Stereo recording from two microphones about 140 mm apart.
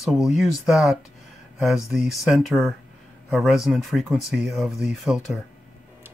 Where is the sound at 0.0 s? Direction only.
5° right (ahead or behind).